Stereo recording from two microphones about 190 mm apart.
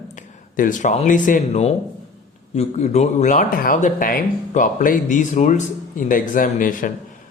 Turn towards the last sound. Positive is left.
turn(degrees=45)  # may be behind; listen again after turning